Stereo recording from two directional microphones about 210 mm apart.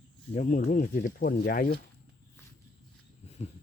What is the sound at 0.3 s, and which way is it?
Speech, 40° left (ahead or behind).